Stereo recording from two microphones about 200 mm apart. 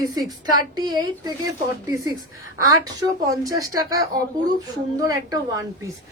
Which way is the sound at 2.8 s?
15° right (ahead or behind).